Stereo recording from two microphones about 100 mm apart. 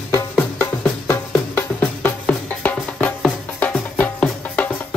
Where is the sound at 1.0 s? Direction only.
20° left (ahead or behind).